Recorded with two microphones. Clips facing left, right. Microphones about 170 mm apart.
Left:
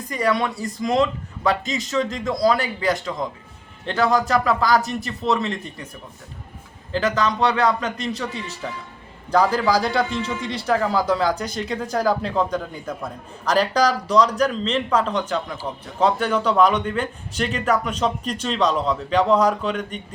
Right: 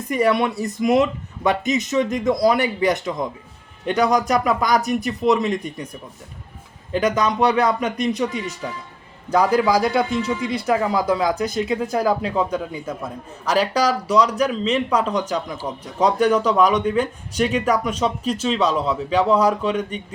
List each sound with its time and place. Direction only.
0.1 s speech: 25° right (ahead or behind)
6.9 s speech: 20° right (ahead or behind)
9.3 s speech: 10° right (ahead or behind)